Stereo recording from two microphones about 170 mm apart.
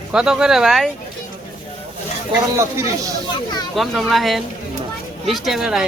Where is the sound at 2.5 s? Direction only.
15° right (ahead or behind).